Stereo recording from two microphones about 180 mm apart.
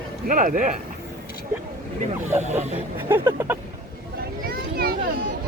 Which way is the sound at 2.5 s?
10° right (ahead or behind).